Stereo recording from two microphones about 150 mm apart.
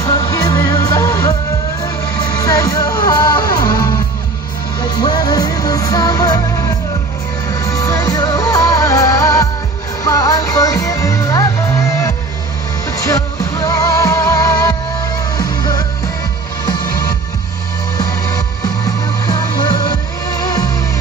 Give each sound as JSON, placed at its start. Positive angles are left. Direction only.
{"t": 0.0, "sound": "music", "side_deg": 20}
{"t": 7.4, "sound": "music", "side_deg": 25}
{"t": 13.6, "sound": "music", "side_deg": 25}
{"t": 17.9, "sound": "music", "side_deg": 25}